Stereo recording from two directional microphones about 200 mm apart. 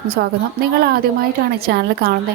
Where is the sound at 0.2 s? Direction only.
55° right (ahead or behind).